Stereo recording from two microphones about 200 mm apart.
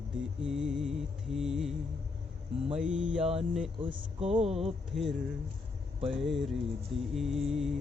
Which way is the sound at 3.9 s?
30° right (ahead or behind).